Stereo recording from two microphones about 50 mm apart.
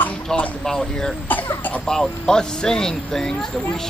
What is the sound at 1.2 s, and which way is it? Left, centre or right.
Speech, left.